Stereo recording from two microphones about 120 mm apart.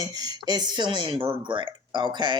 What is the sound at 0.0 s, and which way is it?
Speech, 30° right (ahead or behind).